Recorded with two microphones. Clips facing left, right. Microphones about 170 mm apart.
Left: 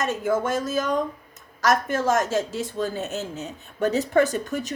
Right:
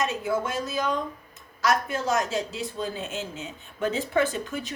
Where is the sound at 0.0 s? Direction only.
45° left (ahead or behind).